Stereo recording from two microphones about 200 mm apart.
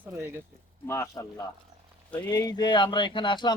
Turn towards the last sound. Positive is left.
turn(degrees=20)  # may be behind; listen again after turning